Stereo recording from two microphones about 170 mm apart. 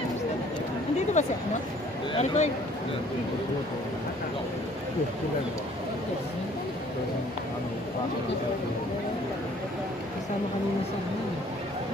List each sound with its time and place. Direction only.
1.2 s speech: 45° left (ahead or behind)